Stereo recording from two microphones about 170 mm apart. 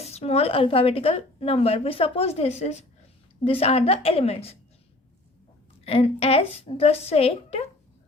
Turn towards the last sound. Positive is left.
turn(degrees=35)  # may be behind; listen again after turning